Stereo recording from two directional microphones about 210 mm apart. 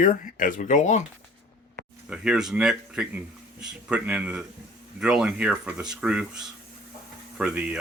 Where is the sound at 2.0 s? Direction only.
5° right (ahead or behind).